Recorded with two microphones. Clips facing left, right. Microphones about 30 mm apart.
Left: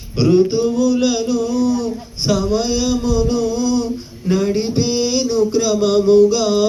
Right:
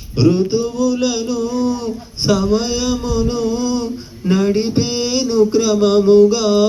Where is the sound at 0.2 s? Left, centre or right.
Centre.